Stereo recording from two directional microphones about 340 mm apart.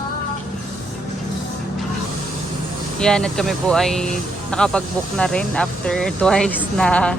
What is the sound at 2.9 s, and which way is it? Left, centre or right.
Speech, centre.